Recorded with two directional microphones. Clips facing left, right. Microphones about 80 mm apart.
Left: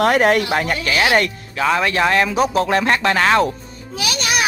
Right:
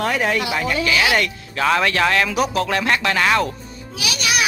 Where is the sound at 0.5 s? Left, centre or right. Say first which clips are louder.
Left 1 dB; left.